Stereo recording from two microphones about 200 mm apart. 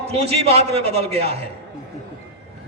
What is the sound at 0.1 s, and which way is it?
A man's voice, 30° right (ahead or behind).